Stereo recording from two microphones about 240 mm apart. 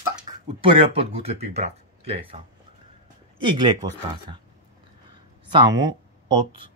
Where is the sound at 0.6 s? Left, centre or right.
Right.